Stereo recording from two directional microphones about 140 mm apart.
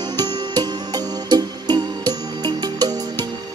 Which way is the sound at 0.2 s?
30° right (ahead or behind).